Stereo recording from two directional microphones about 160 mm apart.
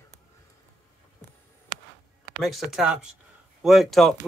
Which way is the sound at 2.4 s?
Centre (ahead or behind).